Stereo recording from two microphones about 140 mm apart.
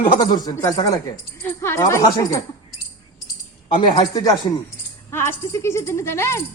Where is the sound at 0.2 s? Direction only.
25° left (ahead or behind).